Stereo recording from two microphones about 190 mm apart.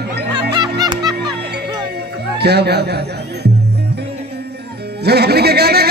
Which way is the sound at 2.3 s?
60° right (ahead or behind).